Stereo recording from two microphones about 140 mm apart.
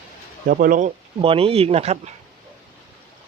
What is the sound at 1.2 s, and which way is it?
Speech, 40° right (ahead or behind).